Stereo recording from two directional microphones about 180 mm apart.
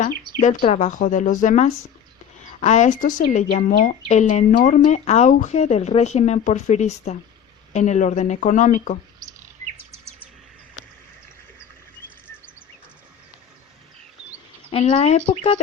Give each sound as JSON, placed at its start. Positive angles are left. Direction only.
{"t": 0.6, "sound": "speech", "side_deg": 40}
{"t": 4.1, "sound": "speech", "side_deg": 40}
{"t": 14.7, "sound": "speech", "side_deg": 35}